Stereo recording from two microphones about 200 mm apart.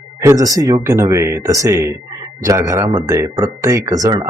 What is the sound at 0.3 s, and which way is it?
Speech, 15° right (ahead or behind).